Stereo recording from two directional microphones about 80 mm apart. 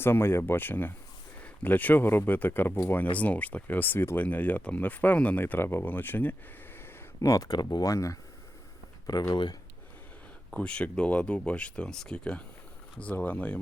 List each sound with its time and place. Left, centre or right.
0.0 s speech: left
7.2 s speech: left
7.9 s speech: left
9.3 s speech: left
10.5 s speech: centre